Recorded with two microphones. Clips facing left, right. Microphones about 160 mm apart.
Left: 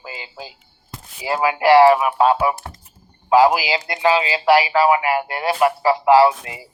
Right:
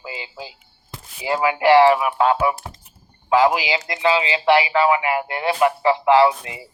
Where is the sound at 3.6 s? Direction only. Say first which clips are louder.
Left 1 dB; 35° left (ahead or behind).